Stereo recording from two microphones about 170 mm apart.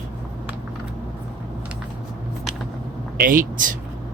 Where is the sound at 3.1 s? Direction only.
55° right (ahead or behind).